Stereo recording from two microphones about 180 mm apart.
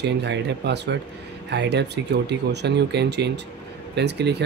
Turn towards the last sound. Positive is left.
turn(degrees=-70)  # may be behind; listen again after turning